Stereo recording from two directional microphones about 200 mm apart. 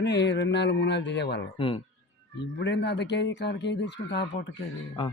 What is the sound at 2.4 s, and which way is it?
Speech, 60° left (ahead or behind).